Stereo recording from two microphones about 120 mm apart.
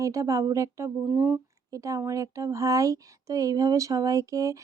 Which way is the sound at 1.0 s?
10° right (ahead or behind).